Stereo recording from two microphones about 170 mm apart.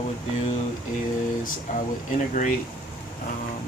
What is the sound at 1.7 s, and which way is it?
Speech, 45° left (ahead or behind).